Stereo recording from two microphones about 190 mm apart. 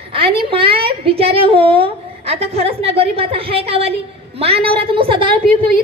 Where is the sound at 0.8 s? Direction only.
30° right (ahead or behind).